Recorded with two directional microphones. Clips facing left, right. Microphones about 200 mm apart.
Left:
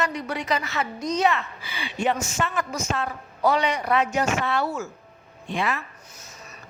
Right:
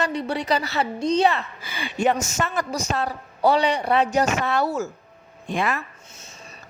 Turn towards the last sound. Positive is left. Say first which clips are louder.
# right 2 dB
turn(degrees=-45)  # may be behind; listen again after turning